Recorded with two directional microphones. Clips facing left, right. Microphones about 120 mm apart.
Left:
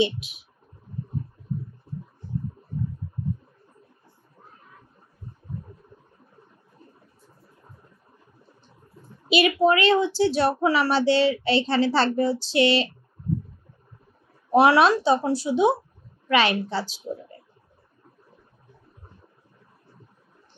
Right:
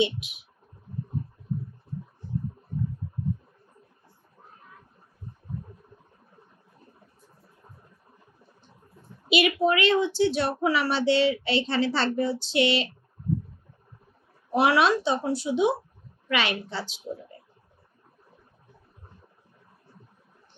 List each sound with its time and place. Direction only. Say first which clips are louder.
0.0 s speech: left 2 dB; 35° left (ahead or behind)
9.3 s speech: left 3 dB; 35° left (ahead or behind)
14.5 s speech: left 4 dB; 35° left (ahead or behind)